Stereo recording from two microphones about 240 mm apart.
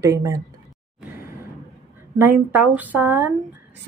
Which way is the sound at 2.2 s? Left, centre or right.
Centre.